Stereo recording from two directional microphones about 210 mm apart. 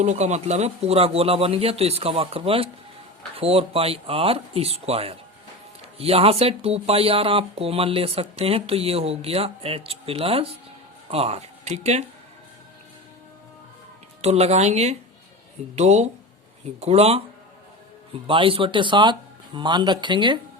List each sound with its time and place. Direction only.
0.0 s speech: 35° right (ahead or behind)
14.2 s speech: 30° right (ahead or behind)